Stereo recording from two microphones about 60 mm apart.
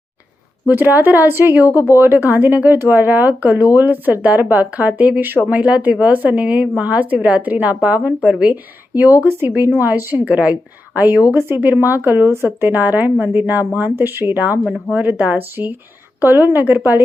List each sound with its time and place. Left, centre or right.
0.7 s speech: right
9.6 s speech: right
14.6 s speech: centre
14.9 s speech: right